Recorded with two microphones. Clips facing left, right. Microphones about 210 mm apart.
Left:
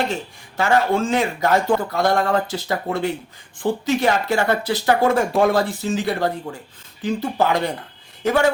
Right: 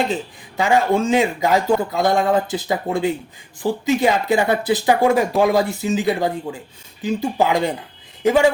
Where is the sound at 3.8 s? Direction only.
15° right (ahead or behind).